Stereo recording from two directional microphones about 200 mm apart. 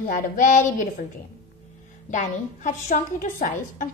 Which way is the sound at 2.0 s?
40° left (ahead or behind).